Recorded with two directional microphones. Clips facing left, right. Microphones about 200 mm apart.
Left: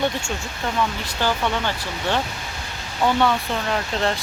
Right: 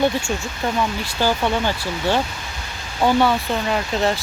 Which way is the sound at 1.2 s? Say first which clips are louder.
Right 3 dB; 10° right (ahead or behind).